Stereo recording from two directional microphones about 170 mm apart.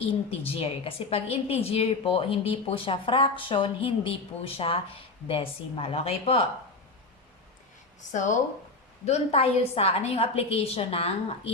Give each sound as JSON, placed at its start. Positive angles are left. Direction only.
{"t": 0.0, "sound": "a woman's voice", "side_deg": 35}
{"t": 8.1, "sound": "a woman's voice", "side_deg": 45}